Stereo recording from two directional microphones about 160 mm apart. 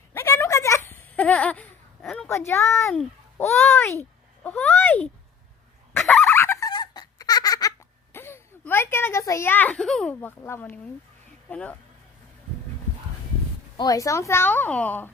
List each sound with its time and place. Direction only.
0.1 s a sound: 15° left (ahead or behind)
2.9 s a woman's voice: 10° left (ahead or behind)
5.9 s fowl: 15° left (ahead or behind)
6.2 s squeak: 15° left (ahead or behind)
8.1 s a woman's voice: 15° left (ahead or behind)
13.7 s a woman's voice: 20° left (ahead or behind)